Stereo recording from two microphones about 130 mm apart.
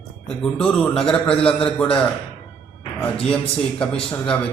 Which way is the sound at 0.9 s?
5° left (ahead or behind).